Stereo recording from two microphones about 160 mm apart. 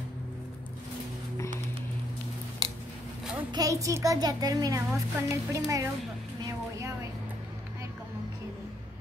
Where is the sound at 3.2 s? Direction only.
5° right (ahead or behind).